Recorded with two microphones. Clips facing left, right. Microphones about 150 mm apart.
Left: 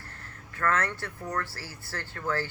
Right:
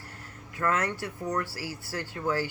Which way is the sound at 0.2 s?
15° right (ahead or behind).